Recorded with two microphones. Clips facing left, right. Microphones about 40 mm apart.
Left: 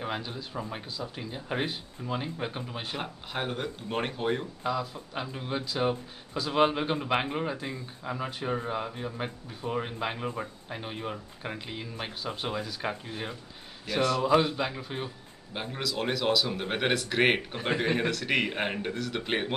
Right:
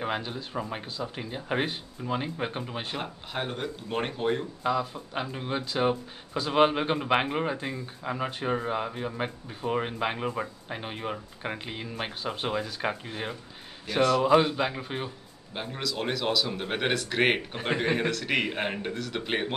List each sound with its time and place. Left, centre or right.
0.0 s speech: centre
4.6 s speech: centre
15.5 s speech: centre